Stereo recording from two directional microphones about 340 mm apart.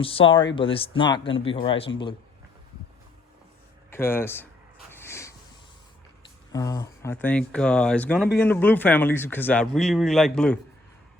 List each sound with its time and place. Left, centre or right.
0.0 s speech: centre
3.9 s speech: centre
4.9 s a sound: centre
6.5 s speech: centre